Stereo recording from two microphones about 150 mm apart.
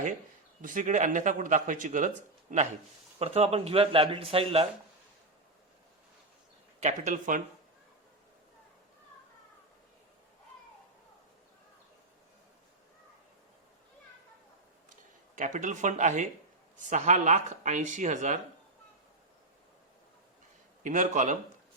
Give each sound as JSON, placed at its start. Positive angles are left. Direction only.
{"t": 0.6, "sound": "speech", "side_deg": -65}
{"t": 3.2, "sound": "a man's voice", "side_deg": -45}
{"t": 6.7, "sound": "speech", "side_deg": -55}
{"t": 15.4, "sound": "speech", "side_deg": -55}
{"t": 20.8, "sound": "a man's voice", "side_deg": -55}